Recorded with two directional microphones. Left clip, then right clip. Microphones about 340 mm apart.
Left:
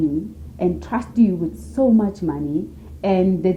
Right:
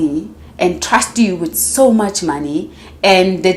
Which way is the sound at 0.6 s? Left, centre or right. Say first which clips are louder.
Right 10 dB; centre.